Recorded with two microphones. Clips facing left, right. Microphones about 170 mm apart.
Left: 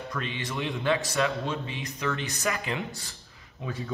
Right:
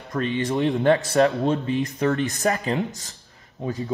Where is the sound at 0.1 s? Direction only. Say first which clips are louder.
Right 12 dB; 45° right (ahead or behind).